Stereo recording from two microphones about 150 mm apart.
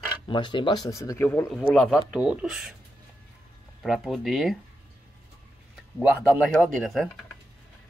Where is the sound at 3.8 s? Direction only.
Centre (ahead or behind).